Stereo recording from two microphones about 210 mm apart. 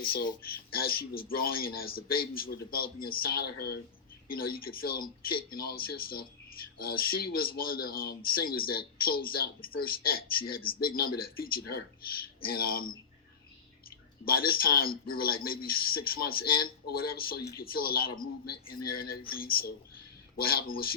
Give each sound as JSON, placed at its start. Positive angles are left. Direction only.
{"t": 0.0, "sound": "speech", "side_deg": 50}
{"t": 14.3, "sound": "speech", "side_deg": 45}